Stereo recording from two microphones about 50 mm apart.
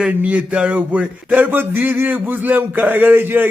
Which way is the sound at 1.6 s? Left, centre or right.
Right.